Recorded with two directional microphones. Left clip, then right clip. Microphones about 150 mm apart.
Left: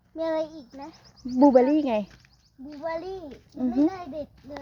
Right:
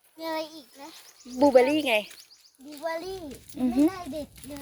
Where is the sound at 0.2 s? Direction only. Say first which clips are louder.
Left 5 dB; 15° right (ahead or behind).